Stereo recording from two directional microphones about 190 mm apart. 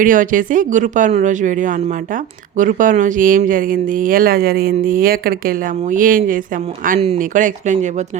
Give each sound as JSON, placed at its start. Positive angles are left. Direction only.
{"t": 0.0, "sound": "speech", "side_deg": -45}